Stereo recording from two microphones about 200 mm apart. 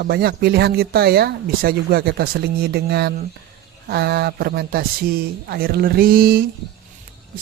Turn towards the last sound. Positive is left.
turn(degrees=-45)  # may be behind; listen again after turning